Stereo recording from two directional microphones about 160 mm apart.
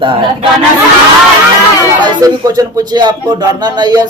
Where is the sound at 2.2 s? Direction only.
25° right (ahead or behind).